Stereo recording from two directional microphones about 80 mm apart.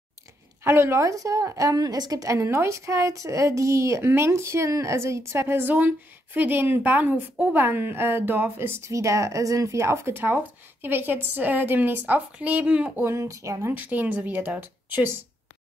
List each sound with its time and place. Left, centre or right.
0.7 s a woman's voice: right; by 13.0 s centre
13.0 s a woman's voice: right
13.7 s speech: right